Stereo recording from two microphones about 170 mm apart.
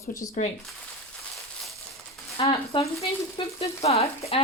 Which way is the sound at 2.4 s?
35° left (ahead or behind).